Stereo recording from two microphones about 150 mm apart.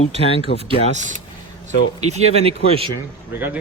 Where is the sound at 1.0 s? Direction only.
55° right (ahead or behind).